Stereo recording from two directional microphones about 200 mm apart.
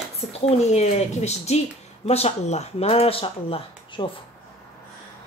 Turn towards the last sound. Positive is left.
turn(degrees=25)  # may be behind; listen again after turning